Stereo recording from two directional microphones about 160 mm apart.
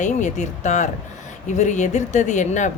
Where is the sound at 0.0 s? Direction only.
50° left (ahead or behind).